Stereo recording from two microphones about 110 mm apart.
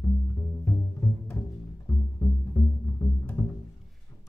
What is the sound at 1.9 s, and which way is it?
Music, 20° left (ahead or behind).